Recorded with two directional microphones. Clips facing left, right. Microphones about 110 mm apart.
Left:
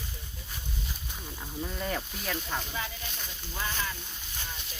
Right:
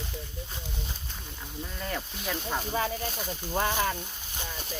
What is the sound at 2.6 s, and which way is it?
Speech, 40° right (ahead or behind).